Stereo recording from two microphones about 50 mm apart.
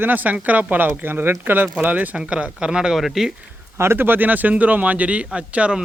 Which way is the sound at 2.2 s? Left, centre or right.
Right.